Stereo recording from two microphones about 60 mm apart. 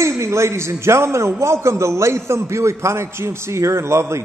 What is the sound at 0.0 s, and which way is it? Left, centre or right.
A man's voice, right.